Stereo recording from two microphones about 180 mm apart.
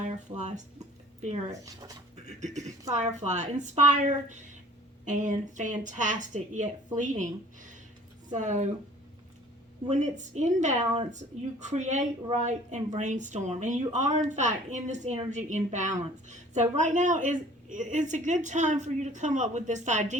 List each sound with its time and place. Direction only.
0.0 s speech: 40° right (ahead or behind)
1.5 s speech: 20° right (ahead or behind)
2.4 s a woman's voice: 40° right (ahead or behind)
8.3 s a woman's voice: 40° right (ahead or behind)
9.9 s a woman's voice: 40° right (ahead or behind)